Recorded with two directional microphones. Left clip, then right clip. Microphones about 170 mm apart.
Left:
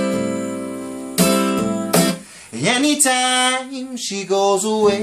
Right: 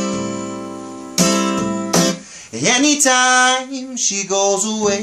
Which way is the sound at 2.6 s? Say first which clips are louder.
Right 2 dB; centre (ahead or behind).